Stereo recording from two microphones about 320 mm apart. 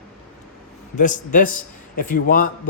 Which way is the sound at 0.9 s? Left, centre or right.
Left.